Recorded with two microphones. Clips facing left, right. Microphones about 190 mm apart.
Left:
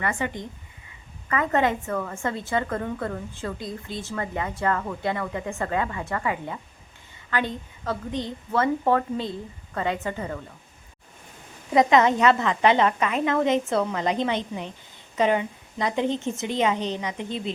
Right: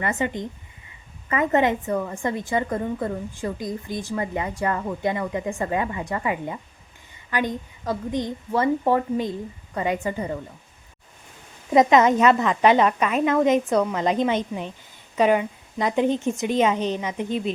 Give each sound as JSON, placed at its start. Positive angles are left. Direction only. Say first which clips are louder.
{"t": 0.0, "sound": "a woman's voice", "louder": "right 3 dB", "side_deg": -20}
{"t": 11.7, "sound": "a woman's voice", "louder": "right 2 dB", "side_deg": -20}
{"t": 15.8, "sound": "a woman's voice", "louder": "right 3 dB", "side_deg": -15}